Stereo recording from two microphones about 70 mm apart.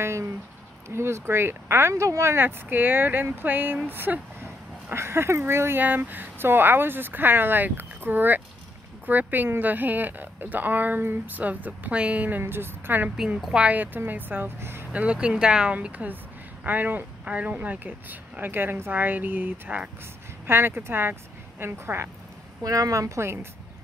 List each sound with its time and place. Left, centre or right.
0.0 s speech: right
13.1 s speech: centre
13.7 s speech: right
14.9 s speech: centre
20.4 s speech: right
22.6 s a woman's voice: right